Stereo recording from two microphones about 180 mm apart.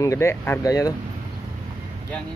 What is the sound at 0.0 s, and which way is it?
Speech, 15° left (ahead or behind).